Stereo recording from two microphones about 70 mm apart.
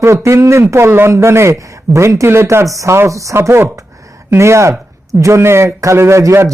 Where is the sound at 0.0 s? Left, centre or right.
Right.